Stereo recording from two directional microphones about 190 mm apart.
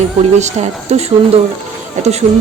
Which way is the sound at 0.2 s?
35° right (ahead or behind).